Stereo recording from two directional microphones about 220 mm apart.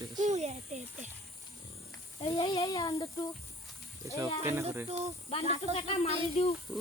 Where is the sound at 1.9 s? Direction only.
15° left (ahead or behind).